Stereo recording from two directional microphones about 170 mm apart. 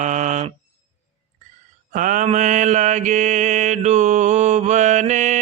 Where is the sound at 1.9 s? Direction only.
50° right (ahead or behind).